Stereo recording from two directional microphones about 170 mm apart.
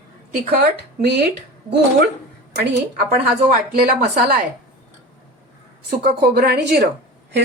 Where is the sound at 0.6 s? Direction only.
70° right (ahead or behind).